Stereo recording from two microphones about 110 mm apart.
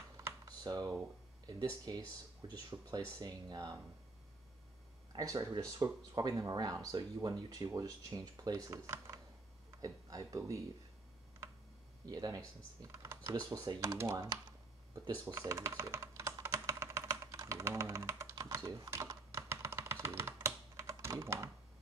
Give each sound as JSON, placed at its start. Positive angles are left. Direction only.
{"t": 0.5, "sound": "speech", "side_deg": -35}
{"t": 5.1, "sound": "speech", "side_deg": -35}
{"t": 12.1, "sound": "speech", "side_deg": -35}
{"t": 12.8, "sound": "speech", "side_deg": -25}
{"t": 15.2, "sound": "speech", "side_deg": -25}
{"t": 16.3, "sound": "computer keyboard", "side_deg": -25}
{"t": 18.3, "sound": "typing", "side_deg": -30}